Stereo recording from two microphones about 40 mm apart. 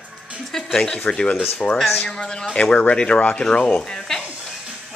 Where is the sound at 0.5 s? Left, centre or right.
Centre.